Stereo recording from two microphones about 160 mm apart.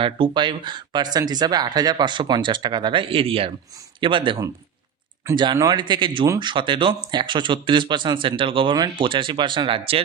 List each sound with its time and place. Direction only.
0.0 s speech: 30° right (ahead or behind)